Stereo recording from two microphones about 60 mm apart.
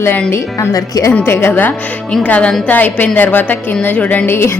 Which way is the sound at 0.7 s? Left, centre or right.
Left.